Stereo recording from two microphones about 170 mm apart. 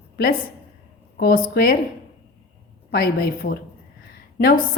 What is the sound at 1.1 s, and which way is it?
Speech, 60° left (ahead or behind).